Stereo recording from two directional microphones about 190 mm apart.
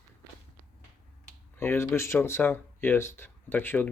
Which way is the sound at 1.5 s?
10° left (ahead or behind).